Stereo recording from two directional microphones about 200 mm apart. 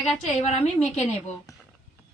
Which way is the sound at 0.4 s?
35° left (ahead or behind).